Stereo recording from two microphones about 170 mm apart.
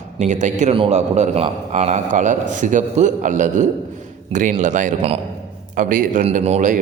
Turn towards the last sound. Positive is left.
turn(degrees=-45)  # may be behind; listen again after turning